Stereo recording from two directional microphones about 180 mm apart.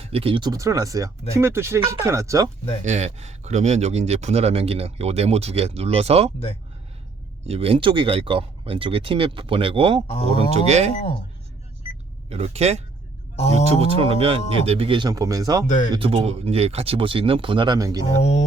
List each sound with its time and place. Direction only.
0.0 s speech: 35° right (ahead or behind); by 2.5 s 15° right (ahead or behind)
2.8 s speech: 40° right (ahead or behind)
7.4 s speech: 35° right (ahead or behind)
10.1 s speech: 35° left (ahead or behind)
10.5 s speech: 40° right (ahead or behind)
12.3 s speech: 35° right (ahead or behind)
13.3 s speech: 35° left (ahead or behind)
13.7 s speech: 35° right (ahead or behind)
15.6 s speech: 45° left (ahead or behind)
15.9 s speech: 30° right (ahead or behind)
18.2 s speech: 40° left (ahead or behind)